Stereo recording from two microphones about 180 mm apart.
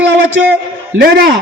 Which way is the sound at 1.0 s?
60° right (ahead or behind).